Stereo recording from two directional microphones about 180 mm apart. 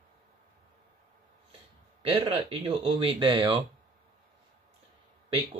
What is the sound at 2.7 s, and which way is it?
Speech, 30° right (ahead or behind).